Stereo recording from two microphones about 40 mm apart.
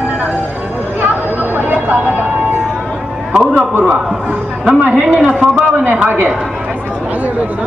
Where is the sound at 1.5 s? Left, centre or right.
Right.